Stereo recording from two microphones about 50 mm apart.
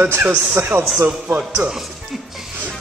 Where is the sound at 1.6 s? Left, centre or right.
Right.